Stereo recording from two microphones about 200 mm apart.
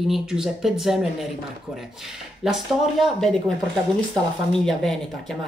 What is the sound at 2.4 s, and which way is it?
Speech, centre (ahead or behind).